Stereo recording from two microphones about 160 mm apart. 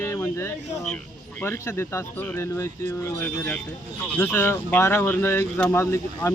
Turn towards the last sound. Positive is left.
turn(degrees=15)  # may be behind; listen again after turning